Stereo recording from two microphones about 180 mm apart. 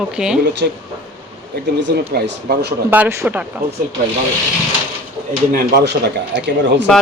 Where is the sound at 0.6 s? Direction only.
65° right (ahead or behind).